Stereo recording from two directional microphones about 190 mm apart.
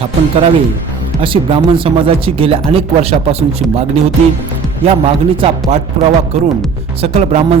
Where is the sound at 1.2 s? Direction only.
25° right (ahead or behind).